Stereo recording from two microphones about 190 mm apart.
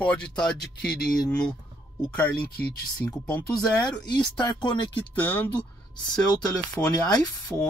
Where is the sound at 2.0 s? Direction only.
10° left (ahead or behind).